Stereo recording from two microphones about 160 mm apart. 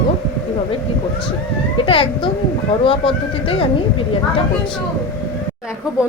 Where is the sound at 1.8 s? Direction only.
35° left (ahead or behind).